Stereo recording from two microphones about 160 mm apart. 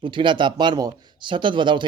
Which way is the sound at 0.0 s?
30° right (ahead or behind).